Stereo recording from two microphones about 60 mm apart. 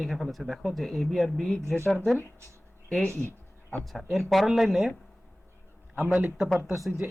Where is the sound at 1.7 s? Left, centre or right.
Centre.